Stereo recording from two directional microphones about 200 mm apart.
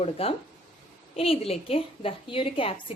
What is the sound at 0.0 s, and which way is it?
A woman's voice, 30° left (ahead or behind).